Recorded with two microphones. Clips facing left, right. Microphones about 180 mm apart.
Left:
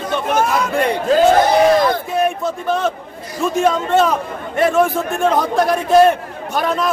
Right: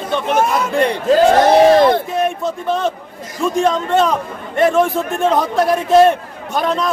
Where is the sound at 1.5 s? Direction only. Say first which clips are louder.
Right 3 dB; 30° right (ahead or behind).